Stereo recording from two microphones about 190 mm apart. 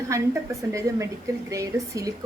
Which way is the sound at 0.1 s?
15° right (ahead or behind).